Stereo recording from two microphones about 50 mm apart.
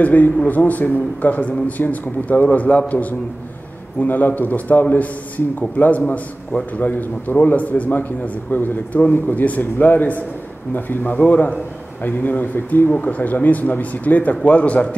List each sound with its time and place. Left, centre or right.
0.0 s a man's voice: left